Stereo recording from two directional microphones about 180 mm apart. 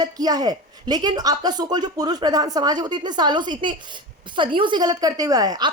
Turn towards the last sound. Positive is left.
turn(degrees=-25)  # may be behind; listen again after turning